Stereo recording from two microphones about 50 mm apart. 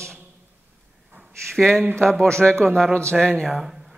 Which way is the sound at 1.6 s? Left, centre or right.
Centre.